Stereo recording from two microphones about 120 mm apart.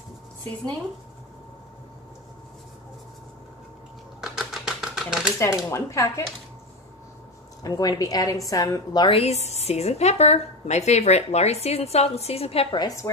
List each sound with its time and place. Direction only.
4.2 s typewriter: centre (ahead or behind)
5.7 s speech: 25° left (ahead or behind)
7.6 s a woman's voice: 35° left (ahead or behind)
9.0 s a woman's voice: 55° left (ahead or behind)
12.7 s a woman's voice: 30° left (ahead or behind)